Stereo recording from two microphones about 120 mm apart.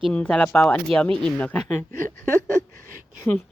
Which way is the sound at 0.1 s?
10° left (ahead or behind).